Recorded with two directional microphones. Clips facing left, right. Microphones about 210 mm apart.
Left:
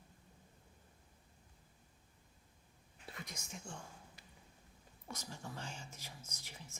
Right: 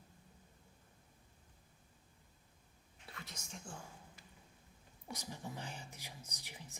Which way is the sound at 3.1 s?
20° left (ahead or behind).